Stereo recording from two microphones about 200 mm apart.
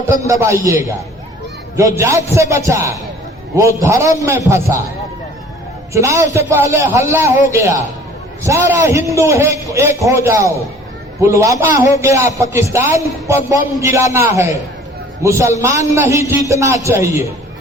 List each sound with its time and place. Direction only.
0.3 s a man's voice: 15° right (ahead or behind)
1.7 s a man's voice: 15° right (ahead or behind)
5.9 s a man's voice: 15° right (ahead or behind)
11.7 s a man's voice: 40° left (ahead or behind)
11.9 s a man's voice: 15° right (ahead or behind)